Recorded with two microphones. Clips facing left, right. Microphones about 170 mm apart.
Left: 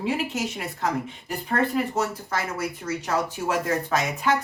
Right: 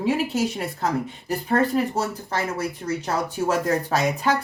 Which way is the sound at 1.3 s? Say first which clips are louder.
Right 4 dB; 40° right (ahead or behind).